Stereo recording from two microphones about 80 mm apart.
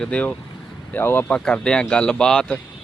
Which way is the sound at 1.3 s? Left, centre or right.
Centre.